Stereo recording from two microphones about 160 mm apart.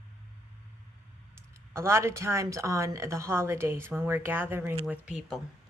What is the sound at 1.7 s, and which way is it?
A woman's voice, 15° right (ahead or behind).